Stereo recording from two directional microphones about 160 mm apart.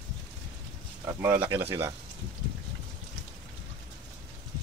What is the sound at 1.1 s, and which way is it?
Speech, 15° right (ahead or behind).